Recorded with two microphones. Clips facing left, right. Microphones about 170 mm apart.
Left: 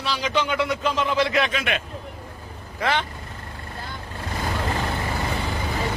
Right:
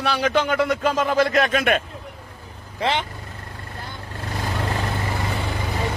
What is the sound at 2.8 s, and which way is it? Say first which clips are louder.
Speech: right 1 dB; 20° right (ahead or behind).